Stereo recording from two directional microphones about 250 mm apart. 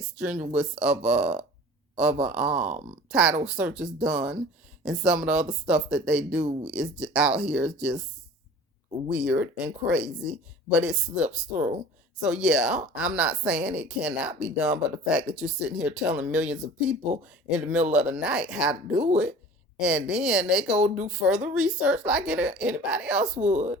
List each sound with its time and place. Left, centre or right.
0.5 s a woman's voice: centre
9.0 s a woman's voice: centre
23.4 s speech: right